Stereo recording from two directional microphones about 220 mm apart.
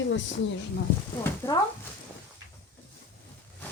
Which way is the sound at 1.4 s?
10° left (ahead or behind).